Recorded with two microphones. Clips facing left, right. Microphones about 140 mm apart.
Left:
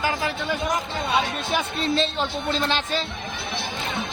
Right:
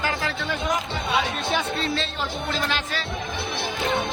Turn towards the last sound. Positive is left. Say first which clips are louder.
# left 3 dB
turn(degrees=25)  # may be behind; listen again after turning